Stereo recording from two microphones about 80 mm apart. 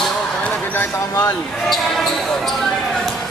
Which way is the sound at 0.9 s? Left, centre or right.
Left.